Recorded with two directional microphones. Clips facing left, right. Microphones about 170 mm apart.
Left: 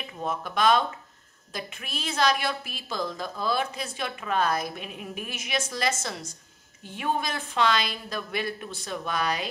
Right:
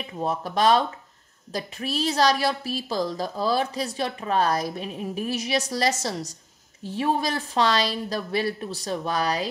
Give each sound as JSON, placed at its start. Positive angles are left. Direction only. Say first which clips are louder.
{"t": 0.0, "sound": "a woman's voice", "louder": "right 4 dB", "side_deg": -35}